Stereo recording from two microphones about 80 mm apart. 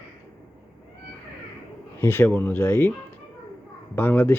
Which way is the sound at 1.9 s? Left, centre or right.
Left.